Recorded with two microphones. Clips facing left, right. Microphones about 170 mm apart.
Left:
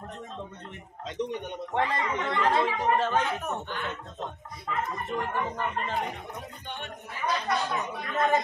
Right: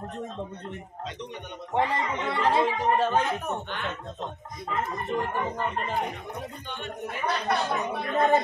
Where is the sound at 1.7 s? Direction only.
10° right (ahead or behind).